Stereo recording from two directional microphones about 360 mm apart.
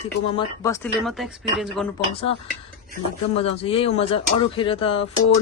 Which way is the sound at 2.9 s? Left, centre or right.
Centre.